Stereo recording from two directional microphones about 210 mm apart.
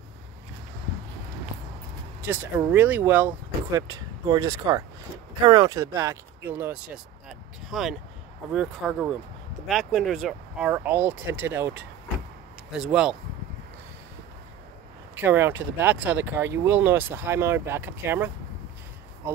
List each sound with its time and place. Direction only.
2.7 s speech: 10° right (ahead or behind)
15.1 s speech: 10° right (ahead or behind)